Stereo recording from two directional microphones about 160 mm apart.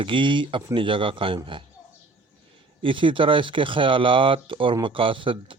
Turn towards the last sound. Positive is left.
turn(degrees=-30)  # may be behind; listen again after turning